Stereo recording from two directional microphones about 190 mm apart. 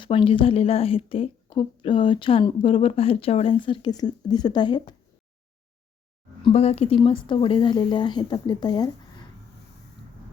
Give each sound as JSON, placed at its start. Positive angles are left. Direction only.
{"t": 0.0, "sound": "a woman's voice", "side_deg": 25}
{"t": 6.4, "sound": "a woman's voice", "side_deg": 30}